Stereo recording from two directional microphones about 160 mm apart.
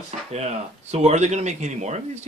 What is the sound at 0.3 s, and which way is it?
Speech, 45° right (ahead or behind).